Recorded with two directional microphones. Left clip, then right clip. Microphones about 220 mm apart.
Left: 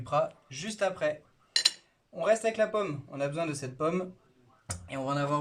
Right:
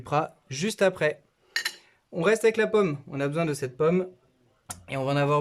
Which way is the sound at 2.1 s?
50° right (ahead or behind).